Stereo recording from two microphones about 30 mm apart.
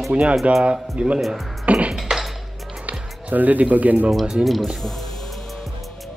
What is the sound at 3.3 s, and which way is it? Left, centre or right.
Speech, right.